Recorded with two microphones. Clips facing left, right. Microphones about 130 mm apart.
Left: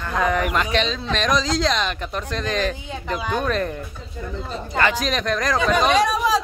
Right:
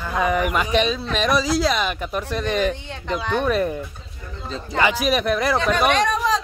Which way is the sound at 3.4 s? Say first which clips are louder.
Right 5 dB; 10° right (ahead or behind).